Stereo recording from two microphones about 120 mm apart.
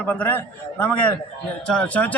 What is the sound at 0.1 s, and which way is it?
A man's voice, 15° left (ahead or behind).